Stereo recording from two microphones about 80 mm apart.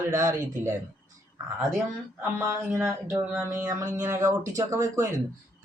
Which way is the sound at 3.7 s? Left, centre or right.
Right.